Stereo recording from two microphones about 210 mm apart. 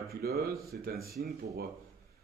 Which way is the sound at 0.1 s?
45° right (ahead or behind).